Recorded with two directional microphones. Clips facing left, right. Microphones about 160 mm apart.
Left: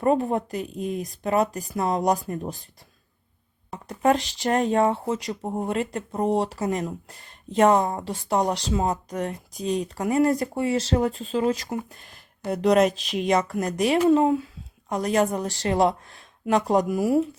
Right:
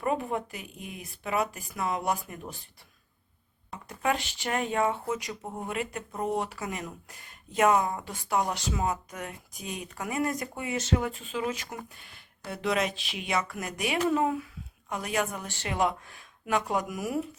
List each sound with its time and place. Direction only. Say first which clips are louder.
0.0 s speech: left 8 dB; 35° left (ahead or behind)
3.8 s a woman's voice: left 8 dB; 35° left (ahead or behind)